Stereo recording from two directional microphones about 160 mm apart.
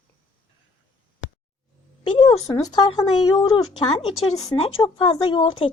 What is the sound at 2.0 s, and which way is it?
Speech, 30° left (ahead or behind).